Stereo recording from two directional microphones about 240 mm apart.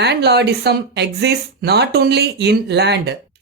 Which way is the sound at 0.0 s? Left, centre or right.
Right.